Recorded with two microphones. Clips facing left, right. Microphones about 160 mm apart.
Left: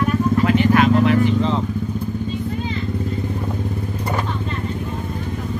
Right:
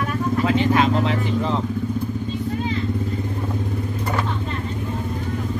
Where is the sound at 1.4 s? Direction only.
5° right (ahead or behind).